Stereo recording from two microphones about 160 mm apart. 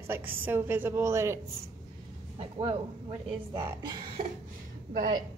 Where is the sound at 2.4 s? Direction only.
35° right (ahead or behind).